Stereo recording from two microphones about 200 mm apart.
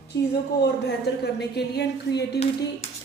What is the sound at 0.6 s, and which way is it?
A woman's voice, 55° left (ahead or behind).